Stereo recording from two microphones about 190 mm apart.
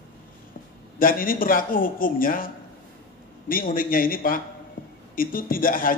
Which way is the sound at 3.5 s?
45° left (ahead or behind).